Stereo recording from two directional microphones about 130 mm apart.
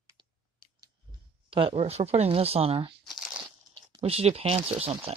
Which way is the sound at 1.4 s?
45° right (ahead or behind).